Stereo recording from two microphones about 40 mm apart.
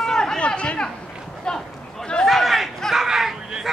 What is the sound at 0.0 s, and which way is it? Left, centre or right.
Chatter, centre.